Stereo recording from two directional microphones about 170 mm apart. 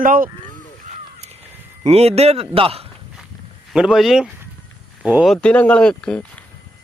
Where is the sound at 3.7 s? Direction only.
5° right (ahead or behind).